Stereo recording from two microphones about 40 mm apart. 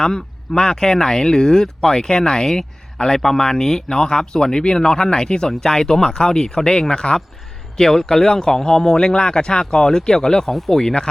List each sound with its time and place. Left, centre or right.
0.0 s speech: centre